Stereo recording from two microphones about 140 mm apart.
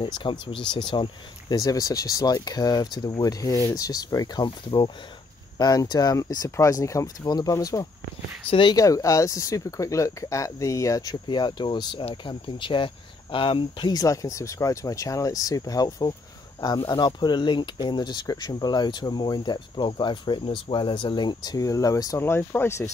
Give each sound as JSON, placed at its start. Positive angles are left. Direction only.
{"t": 0.0, "sound": "speech", "side_deg": 35}
{"t": 8.5, "sound": "speech", "side_deg": 35}
{"t": 8.7, "sound": "speech", "side_deg": 25}
{"t": 12.0, "sound": "speech", "side_deg": 45}